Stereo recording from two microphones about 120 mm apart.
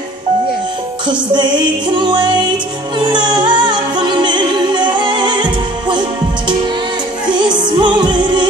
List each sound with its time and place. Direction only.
1.0 s music: 40° right (ahead or behind)
7.2 s music: 40° right (ahead or behind)